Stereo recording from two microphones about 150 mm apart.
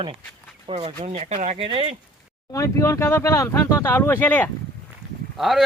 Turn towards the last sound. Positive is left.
turn(degrees=0)  # may be behind; listen again after turning